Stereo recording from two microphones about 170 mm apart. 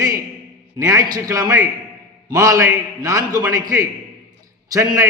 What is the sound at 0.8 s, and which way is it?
A man's voice, 20° right (ahead or behind).